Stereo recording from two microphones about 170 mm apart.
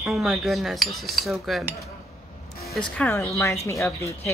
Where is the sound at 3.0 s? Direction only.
5° left (ahead or behind).